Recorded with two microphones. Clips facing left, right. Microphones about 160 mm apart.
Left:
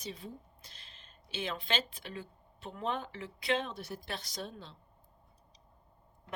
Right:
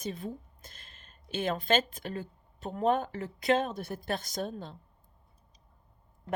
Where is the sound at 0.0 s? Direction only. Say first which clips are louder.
Right 7 dB; 50° right (ahead or behind).